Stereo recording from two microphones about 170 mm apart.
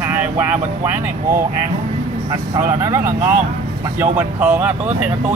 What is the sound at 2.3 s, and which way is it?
Speech, 20° right (ahead or behind).